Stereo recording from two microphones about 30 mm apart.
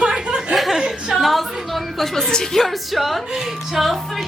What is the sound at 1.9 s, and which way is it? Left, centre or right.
A woman's voice, centre.